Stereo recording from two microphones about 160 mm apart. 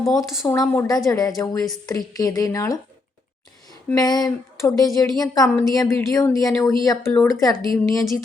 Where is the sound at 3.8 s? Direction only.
25° left (ahead or behind).